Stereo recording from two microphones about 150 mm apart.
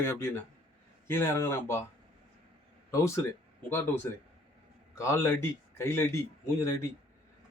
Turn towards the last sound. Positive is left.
turn(degrees=15)  # may be behind; listen again after turning